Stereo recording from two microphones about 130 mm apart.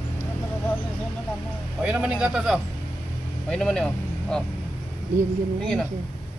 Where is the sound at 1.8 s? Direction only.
10° right (ahead or behind).